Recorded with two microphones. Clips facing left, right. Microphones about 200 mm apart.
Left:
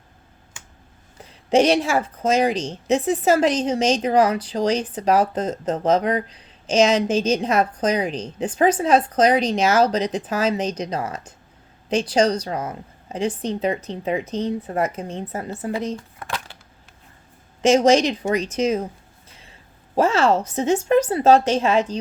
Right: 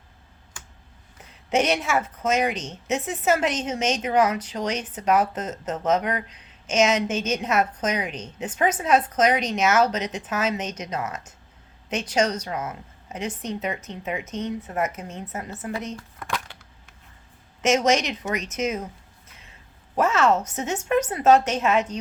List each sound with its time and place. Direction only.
1.2 s a woman's voice: 30° left (ahead or behind)
17.6 s a woman's voice: 30° left (ahead or behind)
19.3 s a sound: 30° left (ahead or behind)
20.0 s a woman's voice: 30° left (ahead or behind)